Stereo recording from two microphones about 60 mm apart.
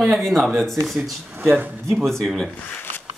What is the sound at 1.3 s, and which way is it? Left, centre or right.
Speech, right.